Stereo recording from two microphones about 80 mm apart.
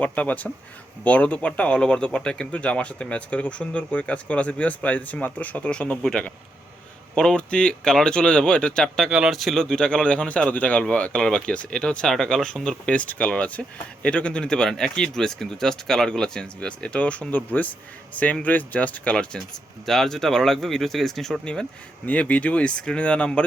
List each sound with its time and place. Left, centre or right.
0.0 s speech: centre
9.0 s speech: centre
9.4 s speech: centre